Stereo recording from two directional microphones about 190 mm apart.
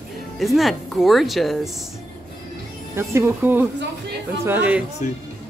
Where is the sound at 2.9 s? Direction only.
10° right (ahead or behind).